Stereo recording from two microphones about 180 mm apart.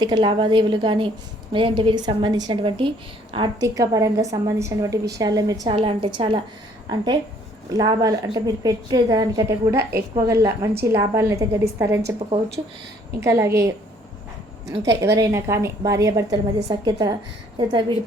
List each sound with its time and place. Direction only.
0.0 s a woman's voice: 25° right (ahead or behind)
5.6 s a woman's voice: 30° right (ahead or behind); by 12.1 s 15° right (ahead or behind)
13.1 s a woman's voice: 15° right (ahead or behind)
15.0 s a woman's voice: 15° right (ahead or behind)